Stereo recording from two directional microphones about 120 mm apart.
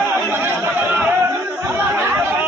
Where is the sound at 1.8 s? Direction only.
15° right (ahead or behind).